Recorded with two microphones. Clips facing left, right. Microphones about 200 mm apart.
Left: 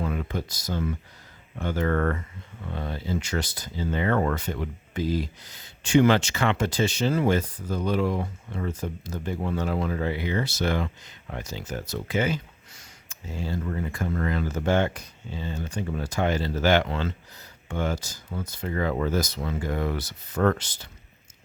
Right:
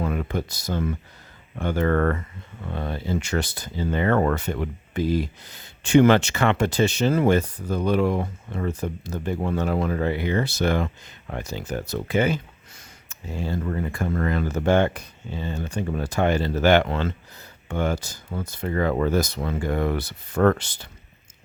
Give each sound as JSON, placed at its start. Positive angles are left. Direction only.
{"t": 0.0, "sound": "speech", "side_deg": -60}